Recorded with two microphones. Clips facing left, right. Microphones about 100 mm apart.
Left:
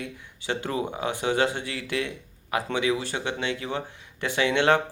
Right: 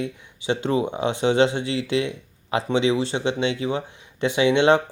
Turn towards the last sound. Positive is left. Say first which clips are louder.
# right 4 dB
turn(degrees=-20)  # may be behind; listen again after turning